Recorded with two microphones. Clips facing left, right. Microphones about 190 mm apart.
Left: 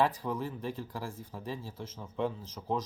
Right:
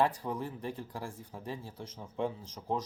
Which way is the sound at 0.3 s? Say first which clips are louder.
Left 2 dB; 15° right (ahead or behind).